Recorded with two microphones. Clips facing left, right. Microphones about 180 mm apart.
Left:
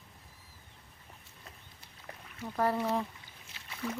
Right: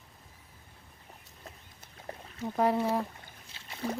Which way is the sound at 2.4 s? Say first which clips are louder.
Right 3 dB; 20° right (ahead or behind).